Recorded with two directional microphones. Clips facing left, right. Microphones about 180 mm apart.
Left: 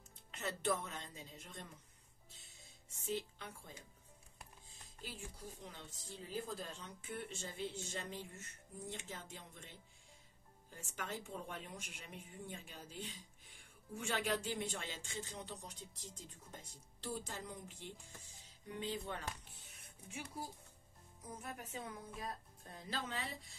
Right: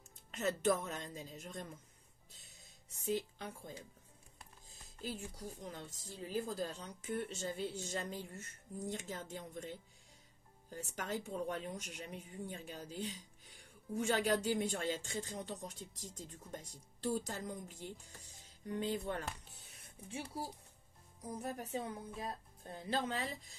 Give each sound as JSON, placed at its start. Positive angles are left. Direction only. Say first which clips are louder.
{"t": 0.4, "sound": "speech", "louder": "right 5 dB", "side_deg": -40}
{"t": 3.1, "sound": "speech", "louder": "right 4 dB", "side_deg": -40}
{"t": 5.6, "sound": "speech", "louder": "right 6 dB", "side_deg": -45}
{"t": 10.7, "sound": "speech", "louder": "right 5 dB", "side_deg": -40}
{"t": 17.0, "sound": "speech", "louder": "right 7 dB", "side_deg": -45}
{"t": 21.2, "sound": "speech", "louder": "right 7 dB", "side_deg": -35}